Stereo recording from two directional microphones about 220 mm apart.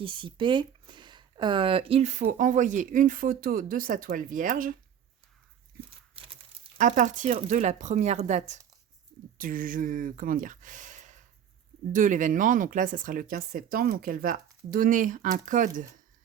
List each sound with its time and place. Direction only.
0.0 s speech: 20° right (ahead or behind); by 4.8 s 40° right (ahead or behind)
6.1 s speech: 25° right (ahead or behind)